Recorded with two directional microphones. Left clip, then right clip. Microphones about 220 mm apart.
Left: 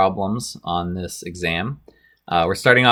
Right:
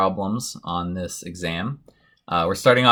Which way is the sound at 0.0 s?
40° left (ahead or behind).